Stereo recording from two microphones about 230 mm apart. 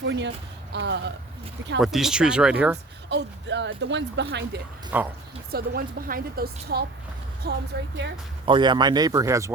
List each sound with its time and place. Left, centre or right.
0.0 s speech: right
1.8 s speech: centre
3.1 s speech: right
4.9 s speech: centre
5.5 s a woman's voice: right
8.4 s speech: right